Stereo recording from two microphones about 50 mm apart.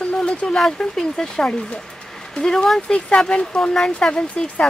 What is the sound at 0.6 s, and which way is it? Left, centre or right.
Speech, centre.